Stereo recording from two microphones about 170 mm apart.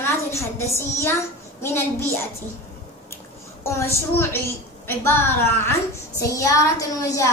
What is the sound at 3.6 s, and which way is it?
A woman's voice, 15° left (ahead or behind).